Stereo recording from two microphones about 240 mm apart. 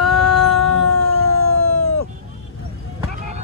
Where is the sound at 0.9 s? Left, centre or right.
Left.